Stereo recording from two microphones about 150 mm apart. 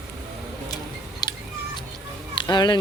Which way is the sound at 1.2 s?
25° left (ahead or behind).